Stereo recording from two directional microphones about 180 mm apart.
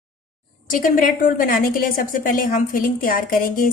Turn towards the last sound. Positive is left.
turn(degrees=50)  # may be behind; listen again after turning